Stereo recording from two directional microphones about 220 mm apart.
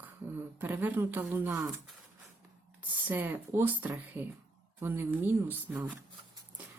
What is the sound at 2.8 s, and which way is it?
Speech, 10° right (ahead or behind).